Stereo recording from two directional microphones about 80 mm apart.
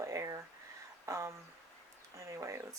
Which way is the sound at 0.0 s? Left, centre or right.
Right.